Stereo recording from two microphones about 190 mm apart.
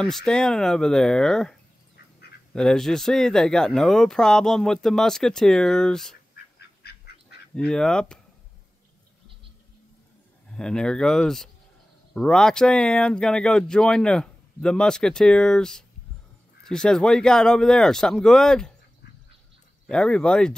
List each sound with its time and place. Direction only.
0.0 s speech: 5° left (ahead or behind)
6.8 s duck: 55° left (ahead or behind)
7.5 s speech: 5° left (ahead or behind)
10.5 s speech: 5° left (ahead or behind)
19.9 s speech: 5° left (ahead or behind)